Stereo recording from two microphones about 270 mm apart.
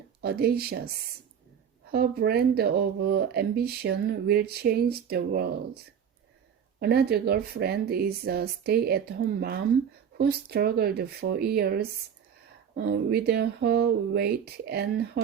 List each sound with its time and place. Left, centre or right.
0.2 s speech: right
1.9 s speech: right